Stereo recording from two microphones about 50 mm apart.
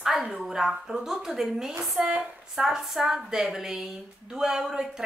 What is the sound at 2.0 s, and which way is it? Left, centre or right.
Speech, right.